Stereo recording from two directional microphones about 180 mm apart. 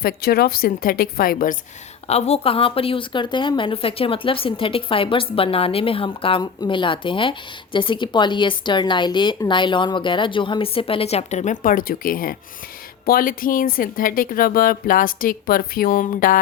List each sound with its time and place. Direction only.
0.0 s a woman's voice: 60° left (ahead or behind)
2.0 s a woman's voice: 35° left (ahead or behind)